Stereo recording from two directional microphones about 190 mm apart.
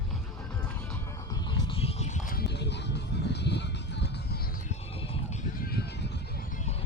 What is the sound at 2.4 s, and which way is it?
Music, 60° left (ahead or behind).